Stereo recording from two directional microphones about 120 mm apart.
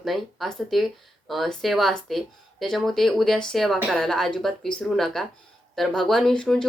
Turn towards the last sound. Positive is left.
turn(degrees=5)  # may be behind; listen again after turning